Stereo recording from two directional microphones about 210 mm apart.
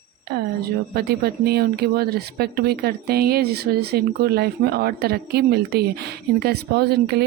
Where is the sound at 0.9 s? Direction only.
50° right (ahead or behind).